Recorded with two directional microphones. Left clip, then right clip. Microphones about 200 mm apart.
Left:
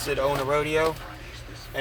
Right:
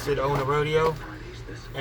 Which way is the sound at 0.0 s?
45° left (ahead or behind).